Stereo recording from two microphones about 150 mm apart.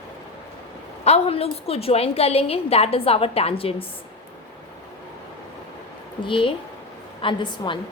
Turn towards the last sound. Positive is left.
turn(degrees=30)  # may be behind; listen again after turning